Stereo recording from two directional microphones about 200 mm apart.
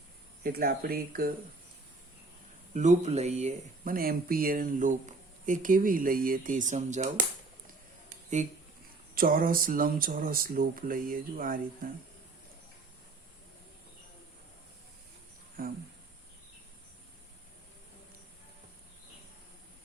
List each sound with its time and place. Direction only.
0.4 s speech: 50° right (ahead or behind)
2.7 s speech: 35° right (ahead or behind)
8.4 s speech: 35° right (ahead or behind)
15.6 s speech: 45° right (ahead or behind)